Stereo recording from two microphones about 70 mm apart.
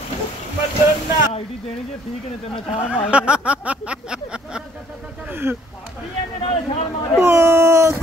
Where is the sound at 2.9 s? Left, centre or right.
Centre.